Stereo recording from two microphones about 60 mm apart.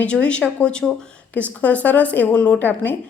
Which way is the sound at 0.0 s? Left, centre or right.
Centre.